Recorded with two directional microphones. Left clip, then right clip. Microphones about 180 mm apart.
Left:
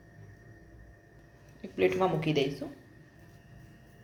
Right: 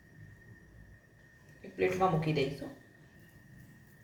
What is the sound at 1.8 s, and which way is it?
Speech, 45° left (ahead or behind).